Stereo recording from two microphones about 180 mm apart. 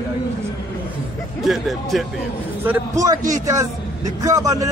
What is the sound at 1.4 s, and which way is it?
A man's voice, centre (ahead or behind).